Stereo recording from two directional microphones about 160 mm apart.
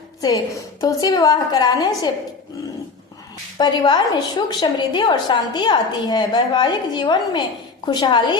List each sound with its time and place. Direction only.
0.2 s a woman's voice: 25° left (ahead or behind)
3.6 s a woman's voice: 25° left (ahead or behind)